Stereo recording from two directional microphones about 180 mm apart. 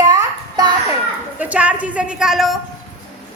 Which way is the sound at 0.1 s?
20° right (ahead or behind).